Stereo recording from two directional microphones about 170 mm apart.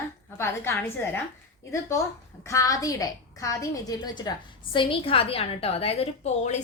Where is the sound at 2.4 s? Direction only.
20° left (ahead or behind).